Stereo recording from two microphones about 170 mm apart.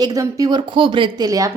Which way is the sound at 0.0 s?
20° right (ahead or behind).